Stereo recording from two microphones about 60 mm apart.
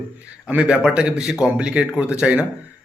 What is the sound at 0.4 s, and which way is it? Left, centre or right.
A man's voice, centre.